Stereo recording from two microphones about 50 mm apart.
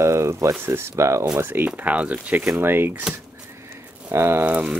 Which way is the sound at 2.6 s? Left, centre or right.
Right.